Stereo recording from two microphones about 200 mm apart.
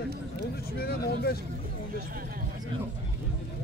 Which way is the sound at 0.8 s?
50° left (ahead or behind).